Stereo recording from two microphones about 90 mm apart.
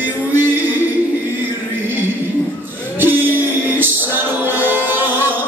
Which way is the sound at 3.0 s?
20° right (ahead or behind).